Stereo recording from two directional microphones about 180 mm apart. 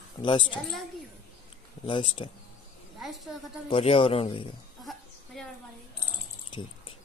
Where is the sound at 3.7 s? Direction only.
30° left (ahead or behind).